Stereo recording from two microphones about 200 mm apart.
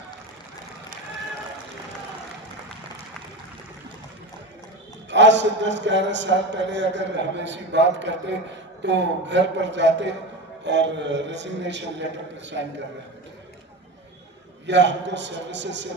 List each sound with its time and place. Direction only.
5.1 s a man's voice: 65° right (ahead or behind)
14.7 s a man's voice: 60° right (ahead or behind)